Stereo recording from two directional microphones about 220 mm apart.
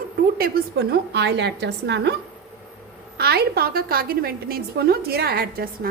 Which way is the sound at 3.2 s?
45° right (ahead or behind).